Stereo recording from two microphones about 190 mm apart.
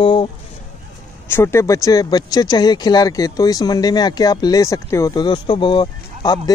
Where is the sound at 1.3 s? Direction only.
15° left (ahead or behind).